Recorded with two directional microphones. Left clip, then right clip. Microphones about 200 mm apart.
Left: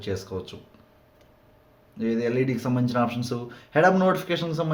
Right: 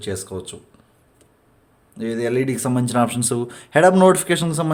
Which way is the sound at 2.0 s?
35° right (ahead or behind).